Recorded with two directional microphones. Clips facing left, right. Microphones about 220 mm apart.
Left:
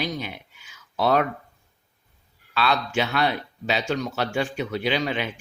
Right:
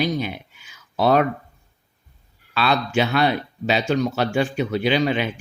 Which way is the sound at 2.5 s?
30° right (ahead or behind).